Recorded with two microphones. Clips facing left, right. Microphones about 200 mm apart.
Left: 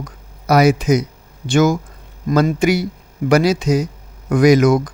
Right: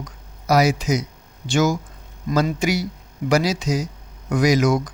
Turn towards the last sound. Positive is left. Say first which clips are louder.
# left 6 dB
turn(degrees=55)  # may be behind; listen again after turning